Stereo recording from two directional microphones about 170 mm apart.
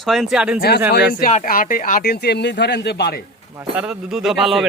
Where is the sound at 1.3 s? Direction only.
50° left (ahead or behind); by 3.2 s 70° left (ahead or behind).